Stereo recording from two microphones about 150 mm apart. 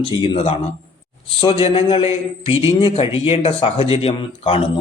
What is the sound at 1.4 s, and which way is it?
Speech, 35° left (ahead or behind).